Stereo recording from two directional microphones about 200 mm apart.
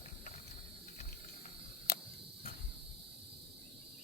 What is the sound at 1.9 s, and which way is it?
Cricket, 50° left (ahead or behind).